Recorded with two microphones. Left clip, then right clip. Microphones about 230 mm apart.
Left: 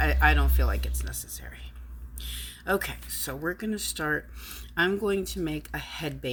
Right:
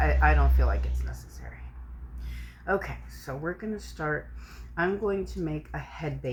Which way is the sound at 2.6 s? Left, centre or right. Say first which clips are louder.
Left 1 dB; left.